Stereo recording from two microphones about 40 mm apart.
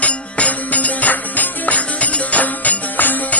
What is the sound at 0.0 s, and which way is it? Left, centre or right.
Music, left.